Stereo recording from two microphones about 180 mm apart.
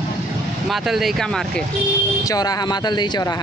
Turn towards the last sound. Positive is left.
turn(degrees=20)  # may be behind; listen again after turning